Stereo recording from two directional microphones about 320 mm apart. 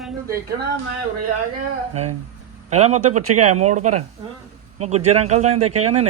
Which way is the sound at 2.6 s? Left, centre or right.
Right.